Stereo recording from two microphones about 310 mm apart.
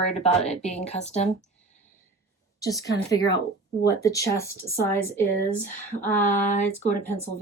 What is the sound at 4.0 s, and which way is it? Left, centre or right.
Speech, centre.